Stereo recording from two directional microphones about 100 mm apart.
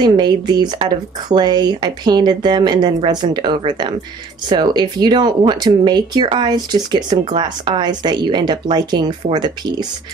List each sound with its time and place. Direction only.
0.0 s speech: 45° right (ahead or behind)